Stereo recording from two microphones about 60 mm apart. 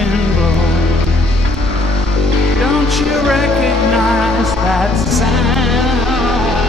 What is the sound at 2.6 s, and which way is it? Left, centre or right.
Music, centre.